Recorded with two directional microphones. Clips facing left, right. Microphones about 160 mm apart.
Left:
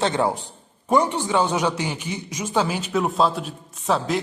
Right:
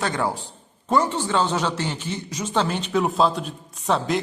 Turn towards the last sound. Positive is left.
turn(degrees=0)  # may be behind; listen again after turning